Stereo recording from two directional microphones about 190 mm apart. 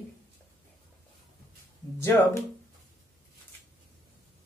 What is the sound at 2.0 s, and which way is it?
Speech, 15° left (ahead or behind).